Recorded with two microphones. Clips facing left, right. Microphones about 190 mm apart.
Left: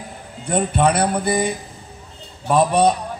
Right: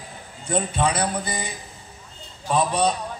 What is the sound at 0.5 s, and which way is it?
A man's voice, 60° left (ahead or behind).